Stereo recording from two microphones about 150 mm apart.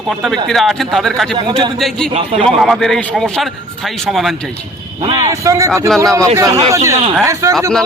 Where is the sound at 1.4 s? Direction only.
35° right (ahead or behind).